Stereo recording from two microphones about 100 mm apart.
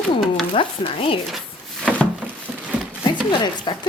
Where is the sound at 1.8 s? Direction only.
10° left (ahead or behind).